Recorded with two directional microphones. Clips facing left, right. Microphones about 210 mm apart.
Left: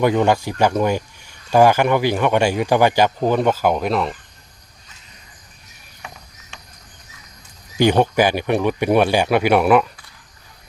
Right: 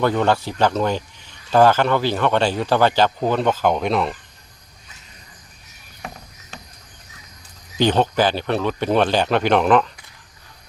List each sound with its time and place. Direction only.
0.0 s a man's voice: 15° left (ahead or behind)
6.5 s a sound: 35° right (ahead or behind)
7.8 s a man's voice: 10° left (ahead or behind)